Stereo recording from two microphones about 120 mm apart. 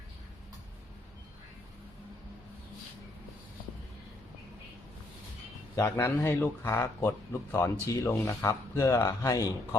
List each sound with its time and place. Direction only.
5.7 s speech: 20° left (ahead or behind)